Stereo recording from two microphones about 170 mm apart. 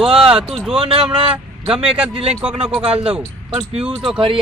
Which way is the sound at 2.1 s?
35° right (ahead or behind).